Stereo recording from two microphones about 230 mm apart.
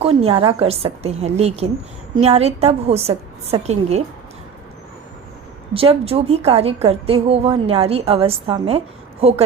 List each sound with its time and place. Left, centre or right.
0.0 s a woman's voice: right
5.7 s a woman's voice: right